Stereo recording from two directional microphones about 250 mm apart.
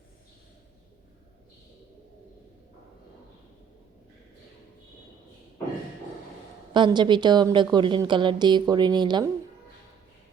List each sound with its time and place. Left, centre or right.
6.7 s a woman's voice: centre